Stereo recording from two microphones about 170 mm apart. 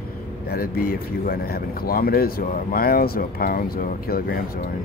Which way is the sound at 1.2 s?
65° left (ahead or behind).